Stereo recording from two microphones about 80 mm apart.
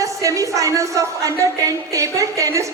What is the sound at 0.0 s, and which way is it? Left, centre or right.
A woman's voice, right.